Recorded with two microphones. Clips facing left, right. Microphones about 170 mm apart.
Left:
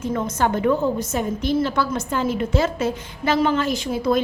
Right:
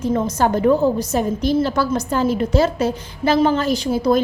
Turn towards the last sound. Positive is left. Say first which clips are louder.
# right 4 dB
turn(degrees=-35)  # may be behind; listen again after turning